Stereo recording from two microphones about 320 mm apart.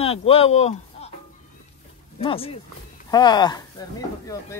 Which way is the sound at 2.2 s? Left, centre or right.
Centre.